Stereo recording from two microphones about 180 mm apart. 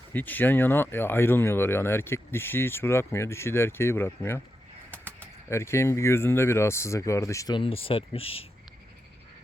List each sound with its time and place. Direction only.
0.1 s speech: 10° left (ahead or behind)
5.5 s speech: 15° left (ahead or behind); by 8.4 s 30° left (ahead or behind)